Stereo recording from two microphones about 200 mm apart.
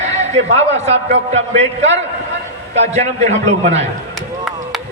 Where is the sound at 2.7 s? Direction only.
35° right (ahead or behind).